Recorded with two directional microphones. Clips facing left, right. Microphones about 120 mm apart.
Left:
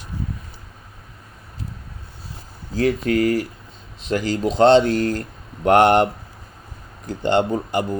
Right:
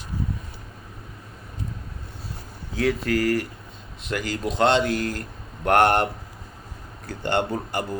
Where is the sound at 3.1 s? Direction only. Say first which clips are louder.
Left 4 dB; 25° left (ahead or behind).